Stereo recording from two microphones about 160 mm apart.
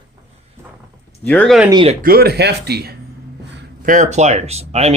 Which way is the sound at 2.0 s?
70° right (ahead or behind).